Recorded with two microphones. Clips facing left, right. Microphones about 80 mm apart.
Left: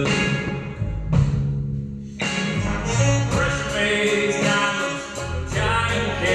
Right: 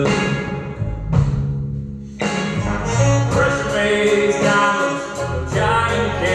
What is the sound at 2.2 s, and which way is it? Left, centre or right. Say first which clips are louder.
Music: right 4 dB; right.